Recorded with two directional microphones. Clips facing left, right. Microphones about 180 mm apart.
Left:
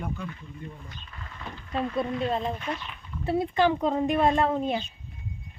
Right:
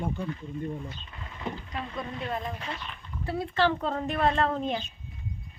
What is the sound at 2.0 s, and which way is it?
Speech, 25° left (ahead or behind).